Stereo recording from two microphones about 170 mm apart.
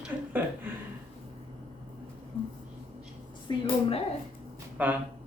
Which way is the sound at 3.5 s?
25° left (ahead or behind).